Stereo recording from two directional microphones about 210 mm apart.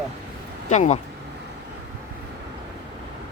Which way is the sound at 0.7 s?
35° left (ahead or behind).